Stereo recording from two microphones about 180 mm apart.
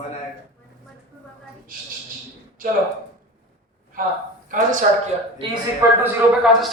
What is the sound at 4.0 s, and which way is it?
Speech, 50° right (ahead or behind).